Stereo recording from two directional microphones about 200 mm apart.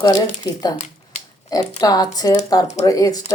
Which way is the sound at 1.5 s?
20° left (ahead or behind).